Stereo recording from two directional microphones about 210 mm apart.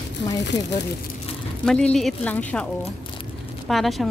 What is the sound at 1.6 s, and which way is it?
A woman's voice, 5° left (ahead or behind).